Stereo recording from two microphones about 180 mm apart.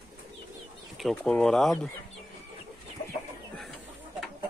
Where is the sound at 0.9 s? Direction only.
Centre (ahead or behind).